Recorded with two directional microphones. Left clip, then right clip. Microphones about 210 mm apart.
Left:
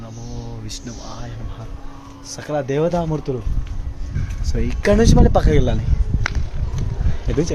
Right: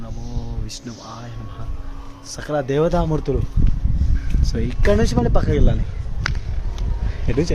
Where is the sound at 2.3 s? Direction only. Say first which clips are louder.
Right 1 dB; 10° right (ahead or behind).